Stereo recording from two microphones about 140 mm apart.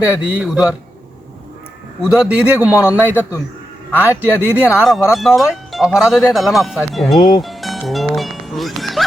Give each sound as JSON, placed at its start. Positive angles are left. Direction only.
{"t": 0.1, "sound": "speech", "side_deg": -10}
{"t": 2.0, "sound": "speech", "side_deg": -10}
{"t": 3.2, "sound": "a man's voice", "side_deg": 20}
{"t": 3.9, "sound": "speech", "side_deg": -10}
{"t": 7.4, "sound": "music", "side_deg": 0}